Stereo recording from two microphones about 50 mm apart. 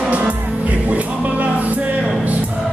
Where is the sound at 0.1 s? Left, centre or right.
Right.